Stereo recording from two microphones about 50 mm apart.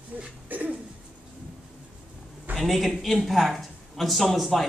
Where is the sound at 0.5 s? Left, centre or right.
Right.